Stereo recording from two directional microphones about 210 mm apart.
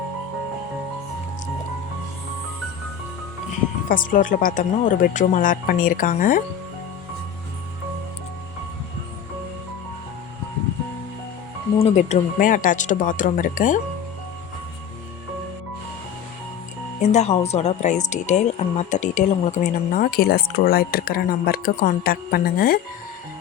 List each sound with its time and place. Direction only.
3.8 s speech: 40° left (ahead or behind)
11.8 s speech: 30° left (ahead or behind)
17.0 s speech: 30° left (ahead or behind)